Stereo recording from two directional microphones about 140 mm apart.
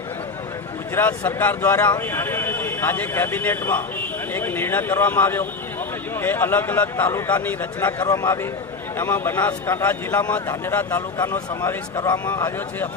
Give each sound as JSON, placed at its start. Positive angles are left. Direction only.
{"t": 0.9, "sound": "a man's voice", "side_deg": 15}